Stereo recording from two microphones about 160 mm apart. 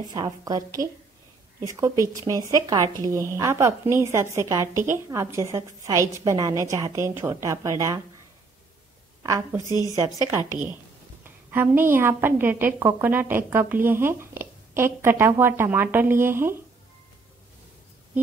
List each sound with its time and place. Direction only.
0.0 s a woman's voice: 25° right (ahead or behind)
9.7 s speech: 20° left (ahead or behind)
10.2 s a woman's voice: 15° right (ahead or behind)